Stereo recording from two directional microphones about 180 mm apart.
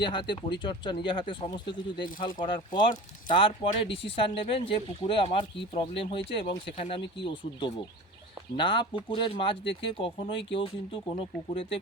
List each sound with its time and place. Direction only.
0.0 s speech: 25° left (ahead or behind)
8.5 s speech: 30° left (ahead or behind)